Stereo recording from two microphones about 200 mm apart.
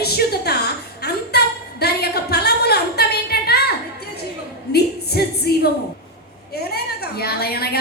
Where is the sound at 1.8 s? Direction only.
50° left (ahead or behind).